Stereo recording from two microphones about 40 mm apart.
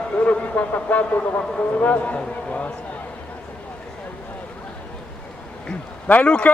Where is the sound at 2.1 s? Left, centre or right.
Left.